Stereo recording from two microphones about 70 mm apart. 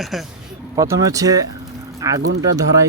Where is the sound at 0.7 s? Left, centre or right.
Right.